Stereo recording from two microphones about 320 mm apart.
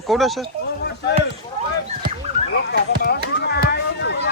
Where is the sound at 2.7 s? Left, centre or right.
Left.